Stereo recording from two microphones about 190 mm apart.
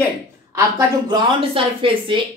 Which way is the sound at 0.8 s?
25° right (ahead or behind).